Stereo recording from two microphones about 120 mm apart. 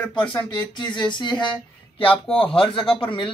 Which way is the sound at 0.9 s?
40° left (ahead or behind).